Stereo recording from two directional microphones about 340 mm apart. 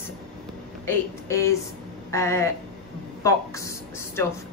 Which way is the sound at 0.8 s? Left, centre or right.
Centre.